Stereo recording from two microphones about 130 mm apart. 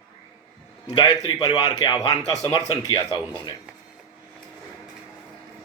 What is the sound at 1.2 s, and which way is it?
Speech, 30° left (ahead or behind).